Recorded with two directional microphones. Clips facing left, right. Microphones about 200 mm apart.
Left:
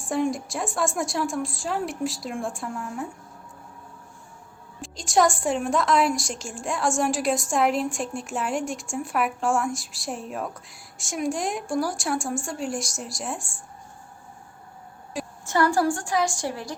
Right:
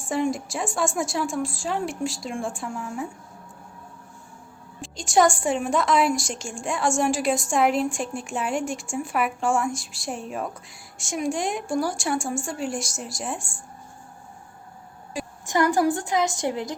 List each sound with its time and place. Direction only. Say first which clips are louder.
0.0 s a woman's voice: even; centre (ahead or behind)
4.8 s a woman's voice: right 1 dB; centre (ahead or behind)
15.4 s a woman's voice: right 1 dB; 15° right (ahead or behind)